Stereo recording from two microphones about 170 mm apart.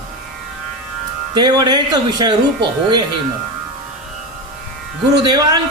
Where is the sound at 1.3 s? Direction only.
25° right (ahead or behind).